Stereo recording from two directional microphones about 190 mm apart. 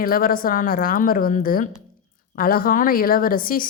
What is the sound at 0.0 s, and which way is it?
Speech, 50° left (ahead or behind).